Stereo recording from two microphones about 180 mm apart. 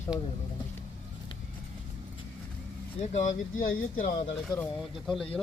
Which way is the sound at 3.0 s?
45° left (ahead or behind).